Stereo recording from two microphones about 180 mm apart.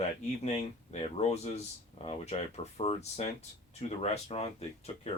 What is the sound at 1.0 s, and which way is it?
Speech, 35° left (ahead or behind).